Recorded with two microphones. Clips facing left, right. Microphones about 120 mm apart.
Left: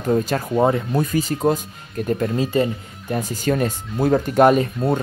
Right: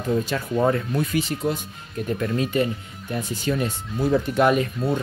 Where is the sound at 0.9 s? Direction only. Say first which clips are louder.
Left 3 dB; 40° left (ahead or behind).